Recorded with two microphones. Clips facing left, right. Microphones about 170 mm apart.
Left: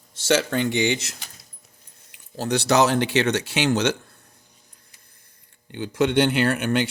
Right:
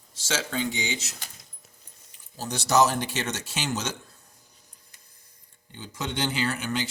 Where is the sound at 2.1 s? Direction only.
65° left (ahead or behind).